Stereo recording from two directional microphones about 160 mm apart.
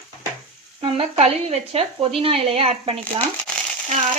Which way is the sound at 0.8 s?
40° right (ahead or behind).